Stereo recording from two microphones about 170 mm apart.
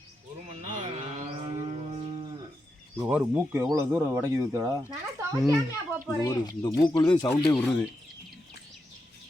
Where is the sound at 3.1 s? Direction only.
15° right (ahead or behind).